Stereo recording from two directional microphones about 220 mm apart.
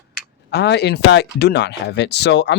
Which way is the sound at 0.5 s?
50° left (ahead or behind).